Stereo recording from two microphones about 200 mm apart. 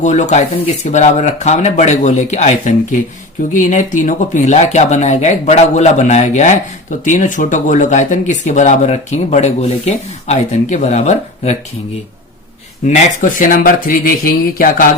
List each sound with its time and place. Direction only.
0.0 s speech: 35° left (ahead or behind)
12.8 s speech: 40° left (ahead or behind)